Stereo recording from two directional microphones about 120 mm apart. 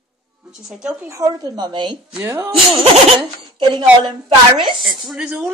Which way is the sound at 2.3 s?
20° right (ahead or behind).